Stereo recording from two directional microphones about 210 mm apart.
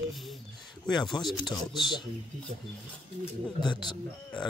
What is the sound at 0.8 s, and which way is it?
Speech, centre (ahead or behind).